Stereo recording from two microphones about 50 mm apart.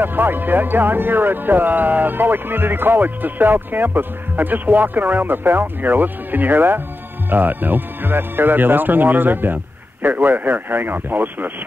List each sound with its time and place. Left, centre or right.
0.0 s speech: right